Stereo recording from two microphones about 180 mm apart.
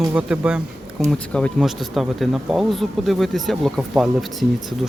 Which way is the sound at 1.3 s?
5° left (ahead or behind).